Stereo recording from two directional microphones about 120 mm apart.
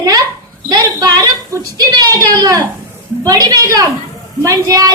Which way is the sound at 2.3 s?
35° right (ahead or behind).